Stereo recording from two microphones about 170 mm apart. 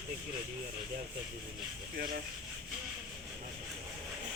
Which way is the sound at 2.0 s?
55° right (ahead or behind).